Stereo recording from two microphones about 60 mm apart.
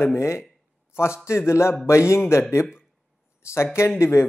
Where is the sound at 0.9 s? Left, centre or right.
Left.